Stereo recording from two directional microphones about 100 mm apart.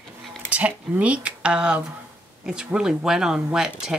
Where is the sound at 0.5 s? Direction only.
15° right (ahead or behind).